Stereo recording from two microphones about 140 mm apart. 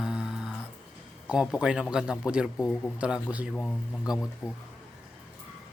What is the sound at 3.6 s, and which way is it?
Speech, 5° left (ahead or behind).